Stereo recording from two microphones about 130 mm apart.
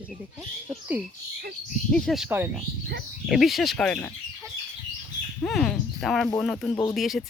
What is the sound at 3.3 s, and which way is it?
Speech, centre (ahead or behind).